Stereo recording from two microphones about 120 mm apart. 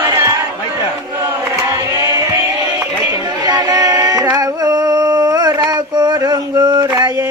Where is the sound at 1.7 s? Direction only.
30° right (ahead or behind).